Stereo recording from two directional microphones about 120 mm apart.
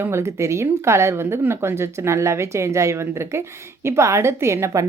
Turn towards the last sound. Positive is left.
turn(degrees=-20)  # may be behind; listen again after turning